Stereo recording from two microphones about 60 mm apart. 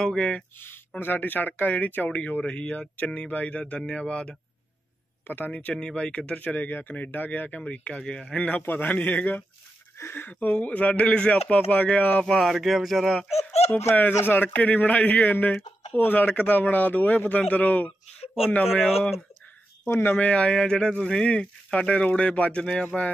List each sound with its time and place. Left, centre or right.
0.0 s speech: centre
0.6 s speech: left; by 4.4 s centre
5.2 s speech: left
5.5 s speech: left
7.6 s speech: centre
9.9 s speech: left
10.5 s speech: left
12.3 s speech: centre
13.7 s speech: left
14.0 s speech: left
18.8 s speech: centre
19.9 s speech: left
20.2 s speech: left